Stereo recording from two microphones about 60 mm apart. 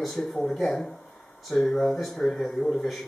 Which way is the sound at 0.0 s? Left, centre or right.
Centre.